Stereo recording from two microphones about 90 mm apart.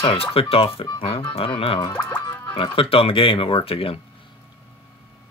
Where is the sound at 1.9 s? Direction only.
25° left (ahead or behind).